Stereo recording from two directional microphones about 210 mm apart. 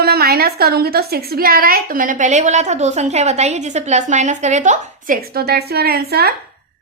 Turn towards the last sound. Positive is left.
turn(degrees=-50)  # may be behind; listen again after turning